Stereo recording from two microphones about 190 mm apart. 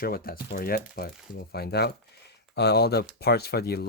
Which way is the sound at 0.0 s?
50° left (ahead or behind).